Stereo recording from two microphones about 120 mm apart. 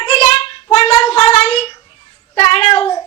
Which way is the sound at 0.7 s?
55° left (ahead or behind).